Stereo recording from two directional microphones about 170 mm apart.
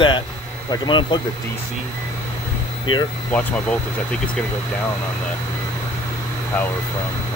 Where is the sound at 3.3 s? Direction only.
5° left (ahead or behind).